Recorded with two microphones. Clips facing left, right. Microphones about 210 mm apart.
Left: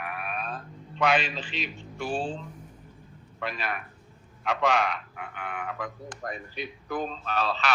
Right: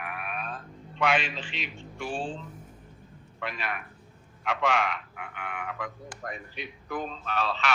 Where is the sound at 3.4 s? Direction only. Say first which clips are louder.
Left 2 dB; 35° left (ahead or behind).